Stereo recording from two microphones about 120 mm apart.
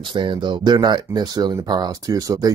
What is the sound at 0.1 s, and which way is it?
Speech, 40° right (ahead or behind).